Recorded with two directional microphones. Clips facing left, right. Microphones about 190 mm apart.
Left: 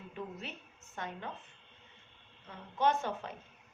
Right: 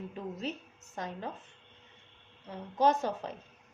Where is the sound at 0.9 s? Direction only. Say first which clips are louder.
Right 3 dB; 35° right (ahead or behind).